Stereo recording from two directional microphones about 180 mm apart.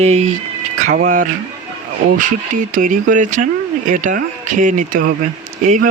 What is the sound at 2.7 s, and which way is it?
A man's voice, 45° right (ahead or behind).